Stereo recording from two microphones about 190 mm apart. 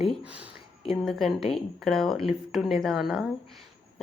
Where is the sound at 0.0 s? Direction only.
5° right (ahead or behind).